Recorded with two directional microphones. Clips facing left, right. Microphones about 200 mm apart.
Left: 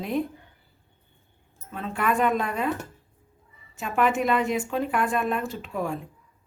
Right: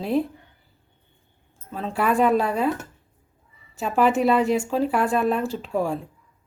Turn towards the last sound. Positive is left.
turn(degrees=-30)  # may be behind; listen again after turning